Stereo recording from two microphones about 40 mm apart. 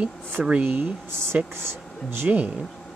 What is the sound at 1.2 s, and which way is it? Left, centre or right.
Speech, right.